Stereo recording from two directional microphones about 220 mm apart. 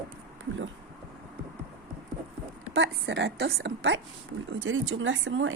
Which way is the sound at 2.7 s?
55° right (ahead or behind).